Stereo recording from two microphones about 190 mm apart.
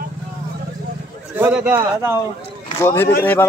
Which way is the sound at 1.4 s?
10° right (ahead or behind).